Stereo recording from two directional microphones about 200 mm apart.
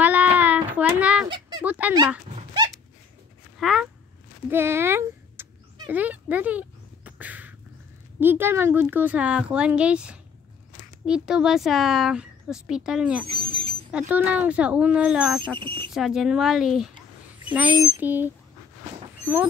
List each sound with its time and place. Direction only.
0.0 s child singing: 10° right (ahead or behind)
1.6 s speech: 5° right (ahead or behind)
2.3 s a sound: 20° right (ahead or behind)
3.5 s speech: centre (ahead or behind)
4.5 s speech: 10° right (ahead or behind)
7.1 s a sound: 10° right (ahead or behind)
8.2 s speech: 10° right (ahead or behind)
13.3 s a sound: 25° right (ahead or behind)
13.9 s speech: 5° right (ahead or behind)
15.6 s smoke detector: 25° right (ahead or behind)
15.9 s speech: centre (ahead or behind)
17.6 s speech: 20° right (ahead or behind)
18.0 s speech: 10° right (ahead or behind)